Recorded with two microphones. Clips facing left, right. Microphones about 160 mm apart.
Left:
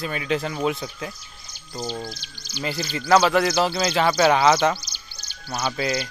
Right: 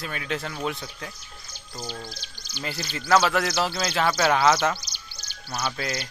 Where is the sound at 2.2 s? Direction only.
50° right (ahead or behind).